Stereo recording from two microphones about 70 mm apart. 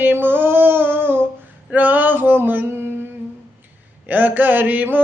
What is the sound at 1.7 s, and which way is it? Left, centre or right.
Male singing, right.